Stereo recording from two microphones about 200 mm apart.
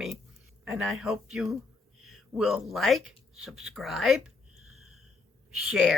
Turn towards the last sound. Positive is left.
turn(degrees=0)  # may be behind; listen again after turning